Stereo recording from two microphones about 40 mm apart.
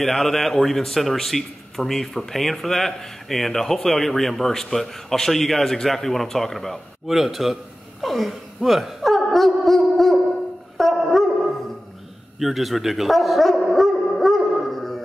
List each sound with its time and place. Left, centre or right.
0.0 s a man's voice: centre
7.1 s a man's voice: centre
8.5 s a sound: centre
10.8 s dog: centre
12.4 s dog: centre